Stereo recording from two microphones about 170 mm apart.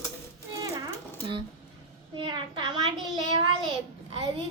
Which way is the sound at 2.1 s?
30° right (ahead or behind).